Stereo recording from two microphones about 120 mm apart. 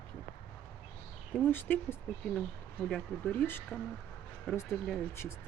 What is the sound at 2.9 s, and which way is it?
Speech, 5° left (ahead or behind).